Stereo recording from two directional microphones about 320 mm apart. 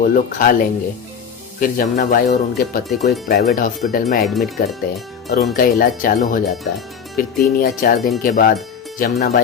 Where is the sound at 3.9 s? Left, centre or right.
Left.